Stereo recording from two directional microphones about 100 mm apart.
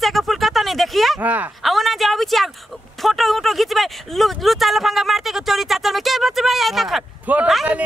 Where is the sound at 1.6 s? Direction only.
Centre (ahead or behind).